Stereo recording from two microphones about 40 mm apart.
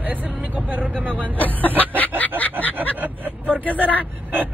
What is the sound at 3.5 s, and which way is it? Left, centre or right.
Speech, left.